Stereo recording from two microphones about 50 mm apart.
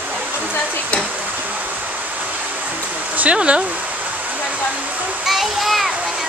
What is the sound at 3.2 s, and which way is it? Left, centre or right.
Speech, right.